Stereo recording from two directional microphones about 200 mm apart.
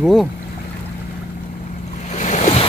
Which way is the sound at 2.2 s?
40° left (ahead or behind).